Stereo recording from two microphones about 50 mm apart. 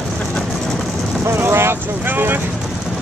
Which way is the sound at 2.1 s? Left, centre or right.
Right.